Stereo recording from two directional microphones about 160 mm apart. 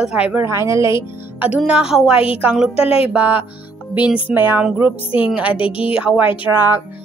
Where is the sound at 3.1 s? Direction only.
10° right (ahead or behind).